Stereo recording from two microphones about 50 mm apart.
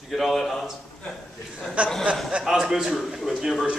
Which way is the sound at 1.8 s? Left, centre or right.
Right.